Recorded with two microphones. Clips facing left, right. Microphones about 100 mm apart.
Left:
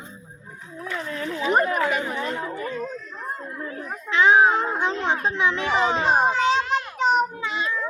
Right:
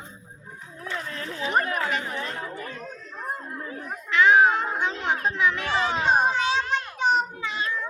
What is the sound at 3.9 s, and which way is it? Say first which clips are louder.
A child's voice: left 1 dB; 25° left (ahead or behind).